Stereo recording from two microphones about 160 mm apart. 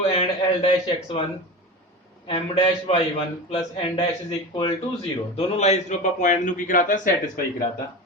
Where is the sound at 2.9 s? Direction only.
35° left (ahead or behind).